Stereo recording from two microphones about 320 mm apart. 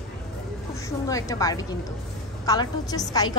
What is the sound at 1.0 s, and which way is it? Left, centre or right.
A woman's voice, centre.